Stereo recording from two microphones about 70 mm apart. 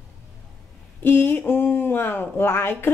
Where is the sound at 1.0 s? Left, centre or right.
Left.